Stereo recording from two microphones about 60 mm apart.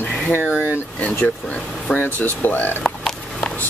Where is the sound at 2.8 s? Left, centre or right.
Centre.